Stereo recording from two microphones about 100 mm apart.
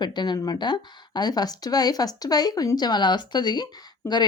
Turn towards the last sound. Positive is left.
turn(degrees=25)  # may be behind; listen again after turning